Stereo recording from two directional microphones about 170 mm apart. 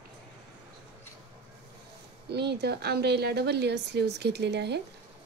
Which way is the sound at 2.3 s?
75° right (ahead or behind).